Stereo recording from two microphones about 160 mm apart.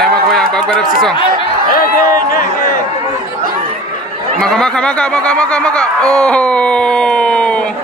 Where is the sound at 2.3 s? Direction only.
60° left (ahead or behind).